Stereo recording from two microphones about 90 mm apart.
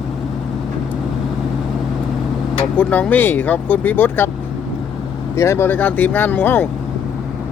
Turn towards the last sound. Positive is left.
turn(degrees=25)  # may be behind; listen again after turning